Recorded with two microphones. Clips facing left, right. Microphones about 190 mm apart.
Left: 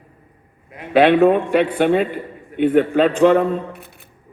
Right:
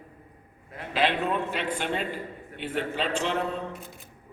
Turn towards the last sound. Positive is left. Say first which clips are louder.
# left 12 dB
turn(degrees=55)  # may be behind; listen again after turning